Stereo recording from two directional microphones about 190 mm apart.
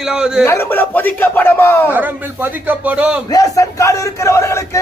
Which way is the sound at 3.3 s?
15° left (ahead or behind).